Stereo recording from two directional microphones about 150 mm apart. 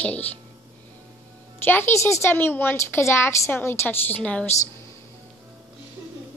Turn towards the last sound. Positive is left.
turn(degrees=10)  # may be behind; listen again after turning